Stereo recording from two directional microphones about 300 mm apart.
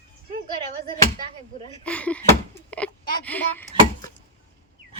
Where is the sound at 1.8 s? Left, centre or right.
Centre.